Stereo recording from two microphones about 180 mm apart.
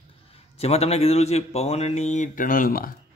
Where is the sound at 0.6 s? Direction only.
35° left (ahead or behind); by 2.9 s 50° left (ahead or behind).